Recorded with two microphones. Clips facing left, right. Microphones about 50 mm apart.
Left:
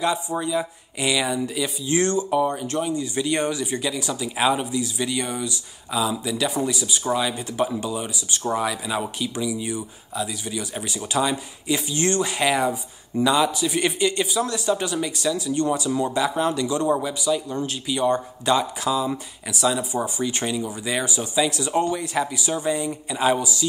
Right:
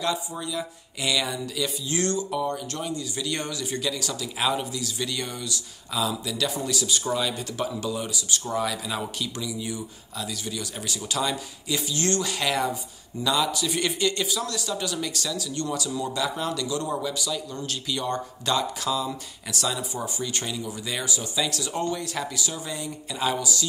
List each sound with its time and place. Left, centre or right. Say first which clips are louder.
0.3 s speech: left 7 dB; left
19.9 s speech: left 6 dB; left